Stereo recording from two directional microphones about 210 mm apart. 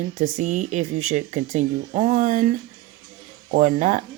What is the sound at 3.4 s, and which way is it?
Speech, 35° right (ahead or behind).